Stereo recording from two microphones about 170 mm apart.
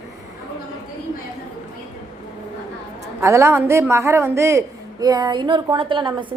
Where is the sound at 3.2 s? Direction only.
15° right (ahead or behind).